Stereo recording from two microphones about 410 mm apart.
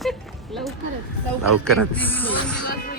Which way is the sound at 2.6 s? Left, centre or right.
Left.